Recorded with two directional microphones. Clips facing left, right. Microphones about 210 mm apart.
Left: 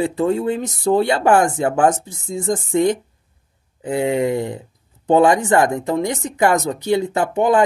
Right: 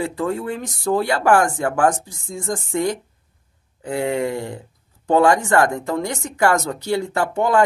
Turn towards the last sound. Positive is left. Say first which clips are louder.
# left 2 dB
turn(degrees=20)  # may be behind; listen again after turning